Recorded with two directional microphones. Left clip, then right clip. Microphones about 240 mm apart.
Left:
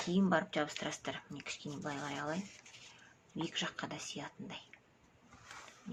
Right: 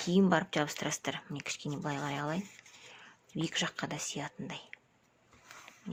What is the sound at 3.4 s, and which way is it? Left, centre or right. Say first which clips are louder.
Speech: right 5 dB; right.